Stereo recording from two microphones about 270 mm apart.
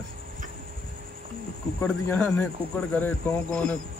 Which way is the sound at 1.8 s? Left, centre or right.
Centre.